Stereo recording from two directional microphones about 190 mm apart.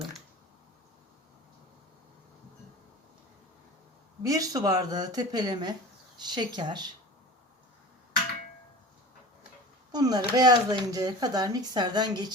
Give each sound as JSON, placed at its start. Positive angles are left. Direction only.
{"t": 4.3, "sound": "speech", "side_deg": -20}
{"t": 9.9, "sound": "speech", "side_deg": -20}